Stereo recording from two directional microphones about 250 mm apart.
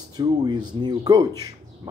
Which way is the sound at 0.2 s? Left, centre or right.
Centre.